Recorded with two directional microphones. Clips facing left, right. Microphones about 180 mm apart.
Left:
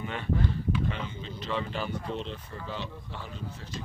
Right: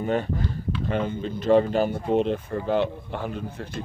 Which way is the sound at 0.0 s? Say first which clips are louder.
Right 6 dB; 45° right (ahead or behind).